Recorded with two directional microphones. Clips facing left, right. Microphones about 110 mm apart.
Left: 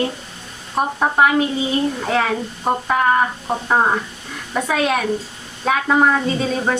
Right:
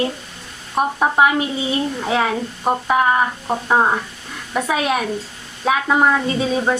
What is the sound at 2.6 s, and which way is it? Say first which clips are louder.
Speech: right 1 dB; 10° right (ahead or behind).